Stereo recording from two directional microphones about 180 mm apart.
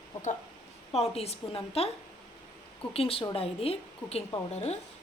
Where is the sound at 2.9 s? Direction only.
30° left (ahead or behind).